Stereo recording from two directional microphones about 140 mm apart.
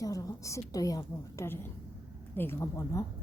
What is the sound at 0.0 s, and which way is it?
A woman's voice, 25° left (ahead or behind).